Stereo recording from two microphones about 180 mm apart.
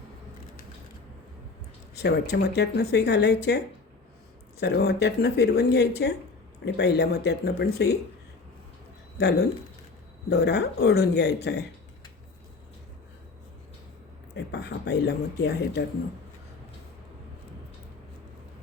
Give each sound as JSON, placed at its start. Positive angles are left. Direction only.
{"t": 2.0, "sound": "speech", "side_deg": 65}
{"t": 4.6, "sound": "speech", "side_deg": 65}
{"t": 9.1, "sound": "speech", "side_deg": 65}
{"t": 14.3, "sound": "speech", "side_deg": 70}